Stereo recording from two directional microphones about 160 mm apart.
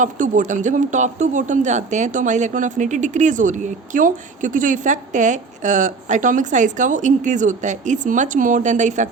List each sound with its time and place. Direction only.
0.0 s speech: 55° right (ahead or behind)